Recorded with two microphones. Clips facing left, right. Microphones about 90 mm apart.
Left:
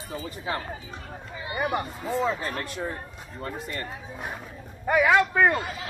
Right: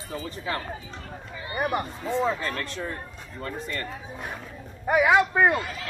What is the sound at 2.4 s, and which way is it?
Speech, 20° left (ahead or behind).